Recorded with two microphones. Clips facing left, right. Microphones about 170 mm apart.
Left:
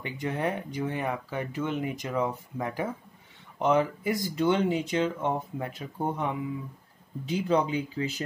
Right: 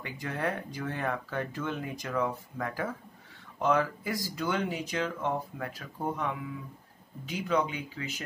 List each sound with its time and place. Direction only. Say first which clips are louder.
0.0 s speech: left 3 dB; 20° left (ahead or behind)